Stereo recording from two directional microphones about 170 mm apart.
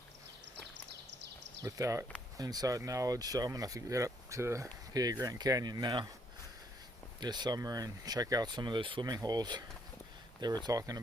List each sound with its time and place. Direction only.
1.6 s speech: 20° right (ahead or behind)
7.2 s speech: 25° right (ahead or behind)
10.7 s speech: 20° right (ahead or behind)